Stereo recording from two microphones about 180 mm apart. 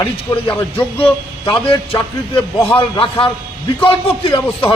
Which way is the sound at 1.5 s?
30° left (ahead or behind).